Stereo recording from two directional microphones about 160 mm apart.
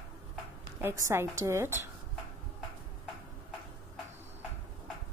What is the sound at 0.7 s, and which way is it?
A woman's voice, 15° right (ahead or behind).